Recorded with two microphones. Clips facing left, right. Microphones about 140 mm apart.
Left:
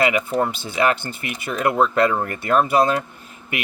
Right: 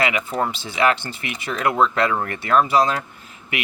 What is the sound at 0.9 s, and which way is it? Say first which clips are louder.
Speech: even; 45° left (ahead or behind).